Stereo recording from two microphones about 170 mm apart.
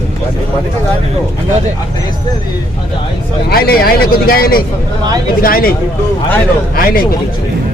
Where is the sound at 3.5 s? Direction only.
60° left (ahead or behind).